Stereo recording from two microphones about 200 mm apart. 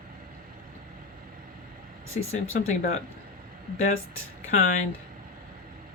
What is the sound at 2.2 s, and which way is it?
Speech, 90° left.